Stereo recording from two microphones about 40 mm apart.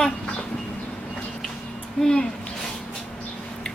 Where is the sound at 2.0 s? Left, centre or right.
Centre.